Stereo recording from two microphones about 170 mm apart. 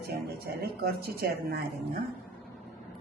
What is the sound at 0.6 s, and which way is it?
Speech, 65° right (ahead or behind).